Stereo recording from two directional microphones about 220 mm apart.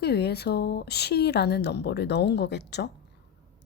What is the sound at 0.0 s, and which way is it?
A woman's voice, 45° left (ahead or behind).